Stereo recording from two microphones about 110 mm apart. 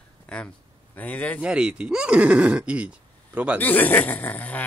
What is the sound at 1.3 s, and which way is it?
Speech, 10° right (ahead or behind).